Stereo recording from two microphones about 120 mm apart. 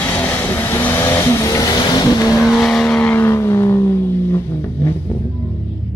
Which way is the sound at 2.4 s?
5° left (ahead or behind).